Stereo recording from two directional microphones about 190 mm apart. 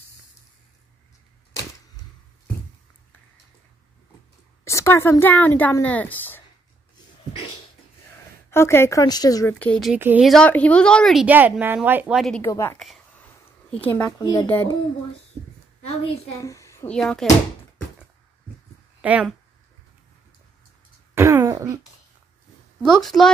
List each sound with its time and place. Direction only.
4.6 s a woman's voice: 15° left (ahead or behind)
8.5 s a woman's voice: 15° left (ahead or behind)
9.9 s speech: 10° right (ahead or behind)
10.2 s a woman's voice: 5° left (ahead or behind)
12.4 s a woman's voice: 15° left (ahead or behind)
12.7 s a sound: centre (ahead or behind)
13.9 s a woman's voice: 20° left (ahead or behind)
16.3 s a child's voice: 15° left (ahead or behind)
16.9 s a woman's voice: 5° left (ahead or behind)
18.9 s speech: 5° right (ahead or behind)
21.1 s throat clearing: 15° right (ahead or behind)
22.8 s a woman's voice: centre (ahead or behind)